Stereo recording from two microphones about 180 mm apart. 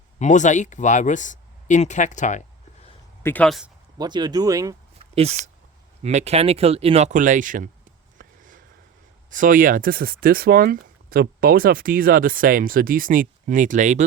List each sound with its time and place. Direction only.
0.2 s speech: 45° left (ahead or behind)
3.2 s speech: 5° left (ahead or behind)
3.9 s speech: 25° right (ahead or behind)
4.9 s a sound: 35° right (ahead or behind)
6.0 s speech: 40° right (ahead or behind)
8.2 s a sound: 50° right (ahead or behind)
9.3 s speech: 50° right (ahead or behind)